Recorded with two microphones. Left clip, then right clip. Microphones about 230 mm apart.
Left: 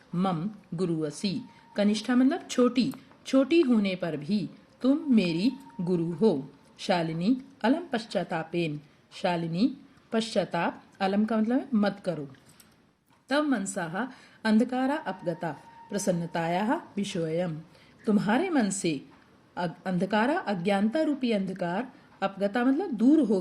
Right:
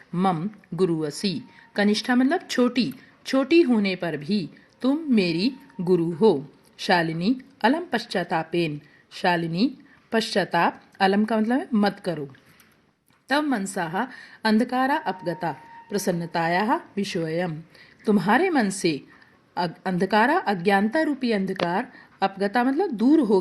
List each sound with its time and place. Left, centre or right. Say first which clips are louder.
0.8 s speech: right 6 dB; right
13.2 s speech: right 3 dB; right